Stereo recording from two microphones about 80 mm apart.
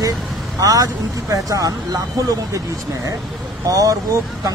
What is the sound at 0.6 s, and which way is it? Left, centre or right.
Speech, right.